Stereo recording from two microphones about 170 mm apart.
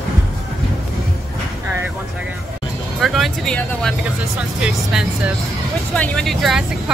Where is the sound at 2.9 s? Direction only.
Centre (ahead or behind).